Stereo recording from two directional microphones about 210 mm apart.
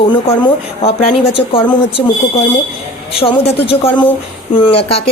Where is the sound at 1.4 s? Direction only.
25° left (ahead or behind).